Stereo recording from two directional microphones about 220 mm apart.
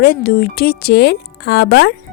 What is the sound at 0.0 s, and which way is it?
Speech, 45° left (ahead or behind).